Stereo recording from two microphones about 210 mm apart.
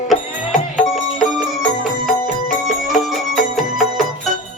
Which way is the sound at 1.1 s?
Centre (ahead or behind).